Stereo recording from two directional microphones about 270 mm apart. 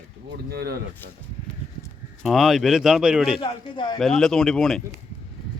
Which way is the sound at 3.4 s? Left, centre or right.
Centre.